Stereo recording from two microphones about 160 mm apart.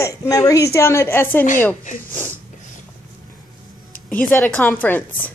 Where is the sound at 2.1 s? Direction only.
10° left (ahead or behind).